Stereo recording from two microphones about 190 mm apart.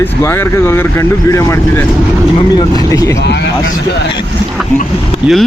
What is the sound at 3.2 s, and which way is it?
Speech, 65° left (ahead or behind).